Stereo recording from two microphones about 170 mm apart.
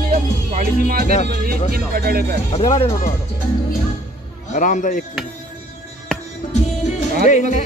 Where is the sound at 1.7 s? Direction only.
60° right (ahead or behind).